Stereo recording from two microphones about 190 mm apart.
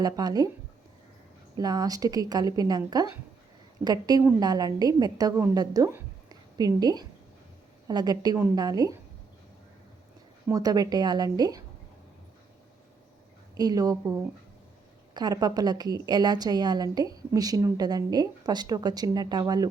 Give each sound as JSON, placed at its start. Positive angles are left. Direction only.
{"t": 0.0, "sound": "a woman's voice", "side_deg": -20}
{"t": 1.5, "sound": "a woman's voice", "side_deg": -20}
{"t": 10.5, "sound": "a woman's voice", "side_deg": -20}
{"t": 13.6, "sound": "a woman's voice", "side_deg": -20}
{"t": 15.1, "sound": "a woman's voice", "side_deg": -20}